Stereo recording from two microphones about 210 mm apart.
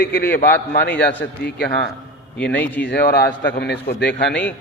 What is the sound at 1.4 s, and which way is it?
Speech, 50° left (ahead or behind).